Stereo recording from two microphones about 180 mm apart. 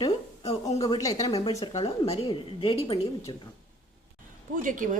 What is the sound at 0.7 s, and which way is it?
Speech, 20° left (ahead or behind).